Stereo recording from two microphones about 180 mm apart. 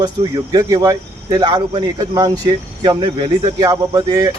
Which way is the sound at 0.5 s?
20° right (ahead or behind).